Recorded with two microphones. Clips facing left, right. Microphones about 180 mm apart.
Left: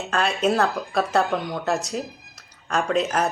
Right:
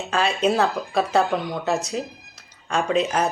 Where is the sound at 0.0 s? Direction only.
Centre (ahead or behind).